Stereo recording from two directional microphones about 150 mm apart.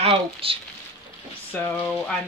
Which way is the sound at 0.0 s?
40° right (ahead or behind).